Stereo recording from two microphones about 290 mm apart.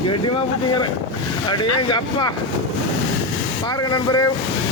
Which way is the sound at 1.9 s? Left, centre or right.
Centre.